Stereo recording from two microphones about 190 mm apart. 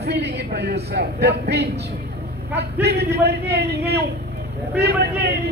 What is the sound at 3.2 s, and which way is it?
Speech, 60° right (ahead or behind).